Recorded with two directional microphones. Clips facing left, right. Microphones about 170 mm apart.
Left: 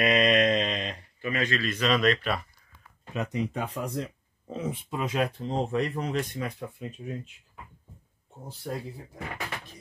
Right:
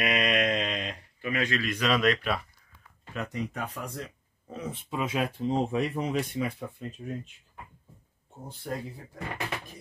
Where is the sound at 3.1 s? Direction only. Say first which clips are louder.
Left 4 dB; 20° left (ahead or behind).